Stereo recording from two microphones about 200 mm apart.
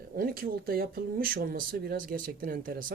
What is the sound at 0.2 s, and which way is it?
Speech, 45° right (ahead or behind).